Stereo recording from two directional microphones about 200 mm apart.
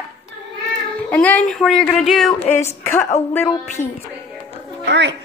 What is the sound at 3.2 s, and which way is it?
Speech, 30° left (ahead or behind).